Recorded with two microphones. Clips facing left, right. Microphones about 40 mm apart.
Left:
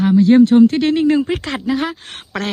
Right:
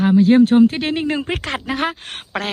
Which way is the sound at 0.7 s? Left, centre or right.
Centre.